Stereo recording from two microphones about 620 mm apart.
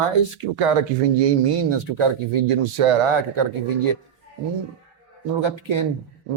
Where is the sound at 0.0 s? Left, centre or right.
Right.